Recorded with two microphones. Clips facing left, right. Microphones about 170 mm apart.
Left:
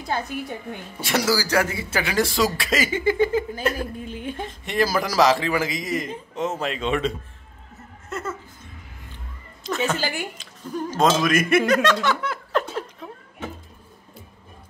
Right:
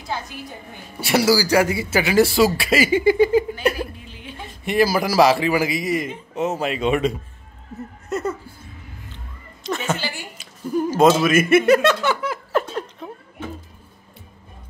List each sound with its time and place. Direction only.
0.1 s a woman's voice: 55° left (ahead or behind)
1.0 s speech: 10° right (ahead or behind)
4.0 s a sound: 50° left (ahead or behind)
4.6 s speech: 10° right (ahead or behind)
9.6 s a sound: centre (ahead or behind)
9.9 s a woman's voice: 45° left (ahead or behind)
10.3 s speech: 10° right (ahead or behind)